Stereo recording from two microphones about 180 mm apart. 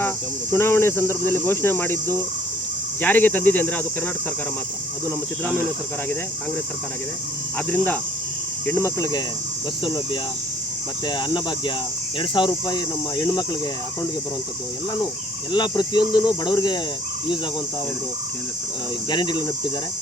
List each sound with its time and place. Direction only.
0.5 s speech: 15° left (ahead or behind)
8.6 s speech: 15° left (ahead or behind)
15.5 s speech: 25° left (ahead or behind)
19.1 s speech: 25° left (ahead or behind)